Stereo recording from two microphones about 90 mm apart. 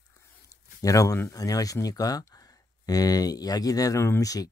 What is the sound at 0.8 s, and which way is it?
Speech, 35° left (ahead or behind).